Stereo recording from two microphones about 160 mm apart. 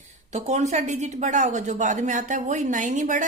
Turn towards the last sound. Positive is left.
turn(degrees=-50)  # may be behind; listen again after turning